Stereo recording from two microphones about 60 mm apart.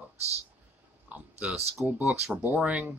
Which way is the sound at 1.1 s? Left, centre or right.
Right.